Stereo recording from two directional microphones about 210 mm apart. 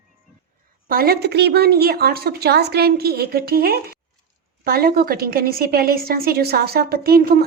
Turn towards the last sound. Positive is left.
turn(degrees=-45)  # may be behind; listen again after turning